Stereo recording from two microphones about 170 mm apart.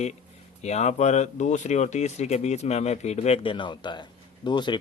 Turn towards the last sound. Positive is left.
turn(degrees=25)  # may be behind; listen again after turning